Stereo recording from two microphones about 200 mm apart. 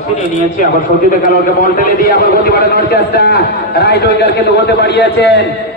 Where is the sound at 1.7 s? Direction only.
45° left (ahead or behind).